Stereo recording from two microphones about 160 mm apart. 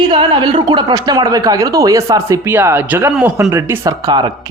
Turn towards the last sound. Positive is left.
turn(degrees=-30)  # may be behind; listen again after turning